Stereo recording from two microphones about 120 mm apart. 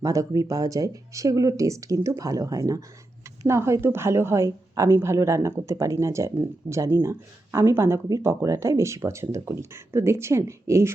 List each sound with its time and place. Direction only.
0.0 s a woman's voice: 30° right (ahead or behind)